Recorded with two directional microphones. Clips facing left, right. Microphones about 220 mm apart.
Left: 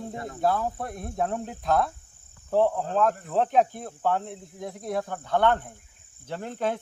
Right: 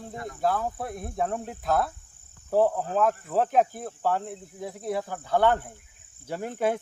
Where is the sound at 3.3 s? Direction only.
5° right (ahead or behind).